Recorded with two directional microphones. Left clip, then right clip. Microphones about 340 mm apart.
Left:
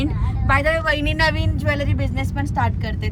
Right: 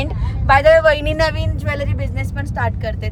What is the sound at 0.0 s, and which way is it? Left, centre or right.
A woman's voice, centre.